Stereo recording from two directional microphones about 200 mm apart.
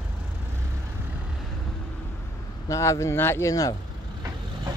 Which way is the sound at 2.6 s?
15° left (ahead or behind).